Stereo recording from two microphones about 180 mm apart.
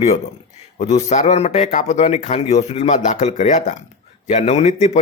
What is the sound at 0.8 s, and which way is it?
A man's voice, 40° left (ahead or behind).